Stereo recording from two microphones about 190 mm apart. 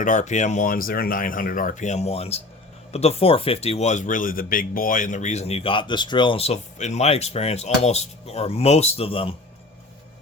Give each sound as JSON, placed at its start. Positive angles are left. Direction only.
{"t": 0.0, "sound": "speech", "side_deg": 40}